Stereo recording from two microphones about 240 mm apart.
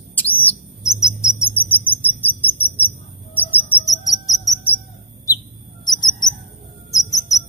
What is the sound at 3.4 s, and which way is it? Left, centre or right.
Cricket, centre.